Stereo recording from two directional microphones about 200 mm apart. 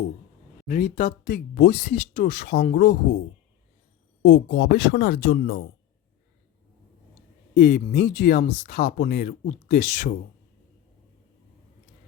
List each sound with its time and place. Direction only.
0.7 s speech: 45° left (ahead or behind); by 2.6 s 60° left (ahead or behind)
2.6 s speech: 45° left (ahead or behind)
4.2 s speech: 60° left (ahead or behind)
7.5 s speech: 45° left (ahead or behind)